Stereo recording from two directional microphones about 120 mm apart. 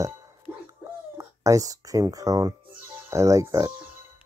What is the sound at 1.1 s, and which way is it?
Speech, 25° right (ahead or behind).